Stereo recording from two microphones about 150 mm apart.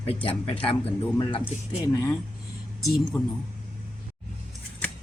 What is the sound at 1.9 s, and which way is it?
Speech, 20° left (ahead or behind).